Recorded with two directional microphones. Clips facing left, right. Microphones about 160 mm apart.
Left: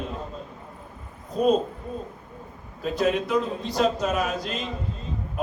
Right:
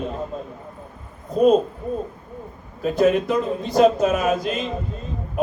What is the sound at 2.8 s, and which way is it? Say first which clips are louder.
Speech: right 6 dB; centre (ahead or behind).